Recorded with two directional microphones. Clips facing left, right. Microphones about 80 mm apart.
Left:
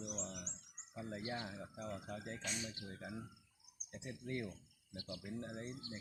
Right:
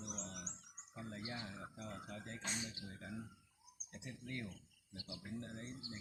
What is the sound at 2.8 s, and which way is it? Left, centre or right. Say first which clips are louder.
Speech: left 1 dB; centre.